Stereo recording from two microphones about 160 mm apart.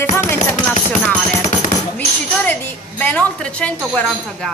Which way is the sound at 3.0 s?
10° left (ahead or behind).